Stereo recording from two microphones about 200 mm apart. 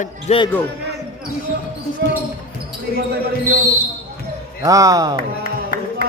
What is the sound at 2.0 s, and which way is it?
Speech, 60° right (ahead or behind).